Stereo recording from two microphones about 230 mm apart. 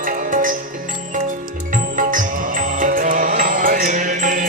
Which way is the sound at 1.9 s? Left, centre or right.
Right.